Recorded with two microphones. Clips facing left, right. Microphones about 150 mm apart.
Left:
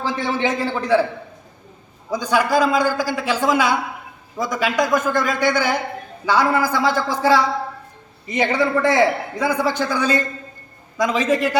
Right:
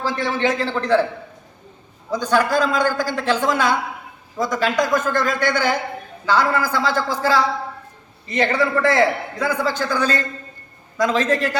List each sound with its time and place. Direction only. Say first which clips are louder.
0.3 s a man's voice: right 1 dB; 15° left (ahead or behind)
2.0 s a man's voice: even; 10° left (ahead or behind)